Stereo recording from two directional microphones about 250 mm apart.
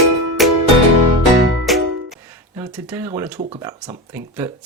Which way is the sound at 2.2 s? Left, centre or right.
Centre.